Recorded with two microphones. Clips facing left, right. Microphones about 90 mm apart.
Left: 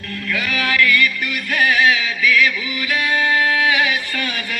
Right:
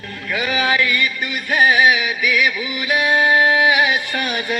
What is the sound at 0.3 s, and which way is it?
Music, 20° right (ahead or behind).